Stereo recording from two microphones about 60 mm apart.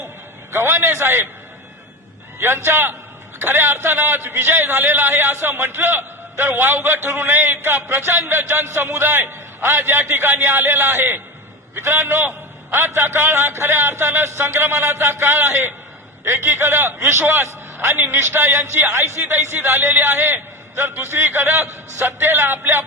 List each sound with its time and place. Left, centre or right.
0.5 s a man's voice: right
2.4 s a man's voice: right